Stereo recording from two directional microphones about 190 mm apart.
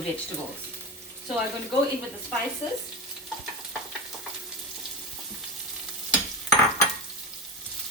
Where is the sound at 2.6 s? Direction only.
30° left (ahead or behind).